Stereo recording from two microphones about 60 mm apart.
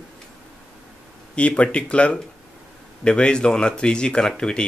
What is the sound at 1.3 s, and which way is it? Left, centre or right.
Speech, centre.